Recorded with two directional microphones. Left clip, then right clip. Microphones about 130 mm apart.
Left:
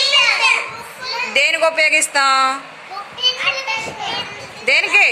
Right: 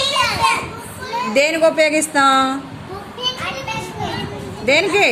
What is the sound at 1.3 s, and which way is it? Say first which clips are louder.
A woman's voice: right 1 dB; 15° left (ahead or behind).